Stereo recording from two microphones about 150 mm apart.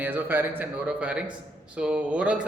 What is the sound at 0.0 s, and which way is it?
A man's voice, 10° right (ahead or behind).